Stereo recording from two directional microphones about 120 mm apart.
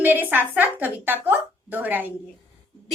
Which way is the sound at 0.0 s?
15° right (ahead or behind).